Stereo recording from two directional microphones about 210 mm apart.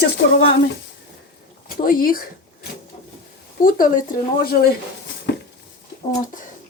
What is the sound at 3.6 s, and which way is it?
Speech, 40° left (ahead or behind).